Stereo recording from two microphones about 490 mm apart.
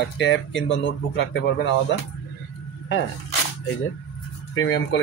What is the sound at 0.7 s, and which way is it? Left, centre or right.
Speech, left.